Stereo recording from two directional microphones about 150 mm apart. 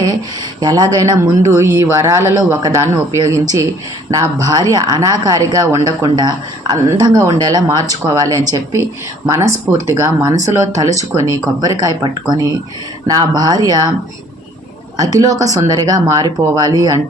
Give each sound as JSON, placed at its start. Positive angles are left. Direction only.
{"t": 0.6, "sound": "speech", "side_deg": -25}
{"t": 13.1, "sound": "speech", "side_deg": -25}
{"t": 14.9, "sound": "speech", "side_deg": -25}